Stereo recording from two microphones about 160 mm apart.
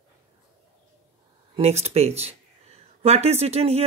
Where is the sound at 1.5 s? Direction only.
40° right (ahead or behind).